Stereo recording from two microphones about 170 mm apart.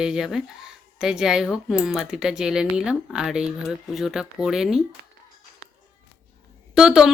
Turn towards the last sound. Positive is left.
turn(degrees=-5)  # may be behind; listen again after turning